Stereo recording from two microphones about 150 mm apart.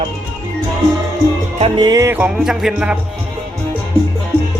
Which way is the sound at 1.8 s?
20° right (ahead or behind).